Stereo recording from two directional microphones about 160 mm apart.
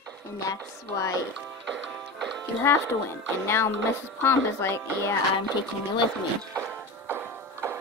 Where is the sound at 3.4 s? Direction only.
15° left (ahead or behind).